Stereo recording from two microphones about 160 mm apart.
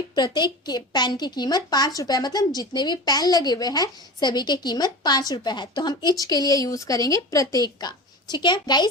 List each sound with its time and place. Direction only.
0.1 s a woman's voice: 25° left (ahead or behind)